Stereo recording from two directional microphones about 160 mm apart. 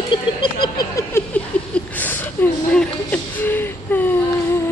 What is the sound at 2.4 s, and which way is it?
Speech, 10° left (ahead or behind).